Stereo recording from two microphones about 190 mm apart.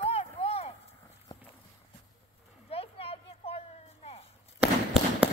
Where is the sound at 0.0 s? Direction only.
30° left (ahead or behind).